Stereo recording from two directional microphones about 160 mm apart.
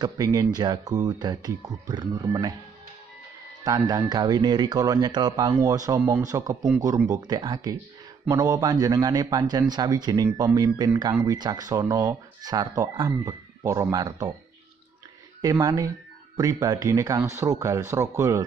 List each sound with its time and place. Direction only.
0.0 s speech: 25° right (ahead or behind)
3.6 s speech: 25° right (ahead or behind)
15.6 s speech: 20° right (ahead or behind)